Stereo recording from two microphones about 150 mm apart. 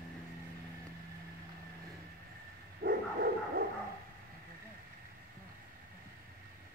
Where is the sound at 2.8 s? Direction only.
90° right.